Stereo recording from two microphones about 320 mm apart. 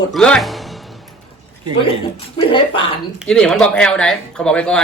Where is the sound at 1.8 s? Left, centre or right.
Centre.